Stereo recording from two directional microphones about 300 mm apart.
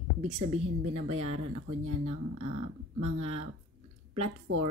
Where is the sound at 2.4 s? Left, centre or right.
Right.